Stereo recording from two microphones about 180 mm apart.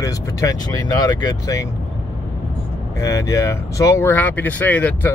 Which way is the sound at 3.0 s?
15° left (ahead or behind).